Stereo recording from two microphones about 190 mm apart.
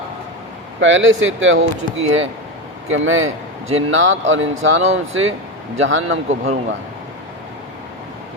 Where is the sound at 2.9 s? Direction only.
90° right.